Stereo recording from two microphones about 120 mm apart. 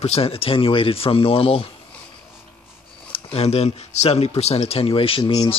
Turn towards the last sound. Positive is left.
turn(degrees=50)  # may be behind; listen again after turning